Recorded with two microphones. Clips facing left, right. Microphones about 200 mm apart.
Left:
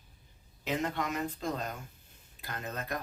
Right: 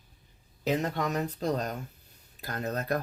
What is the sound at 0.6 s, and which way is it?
Speech, 40° right (ahead or behind).